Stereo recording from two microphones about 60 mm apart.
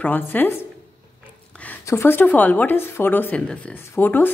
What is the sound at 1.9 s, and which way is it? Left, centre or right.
A woman's voice, left.